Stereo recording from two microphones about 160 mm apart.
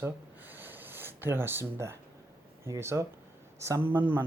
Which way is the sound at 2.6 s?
15° right (ahead or behind).